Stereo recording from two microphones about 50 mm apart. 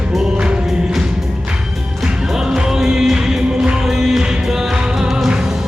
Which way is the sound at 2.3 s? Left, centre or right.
Centre.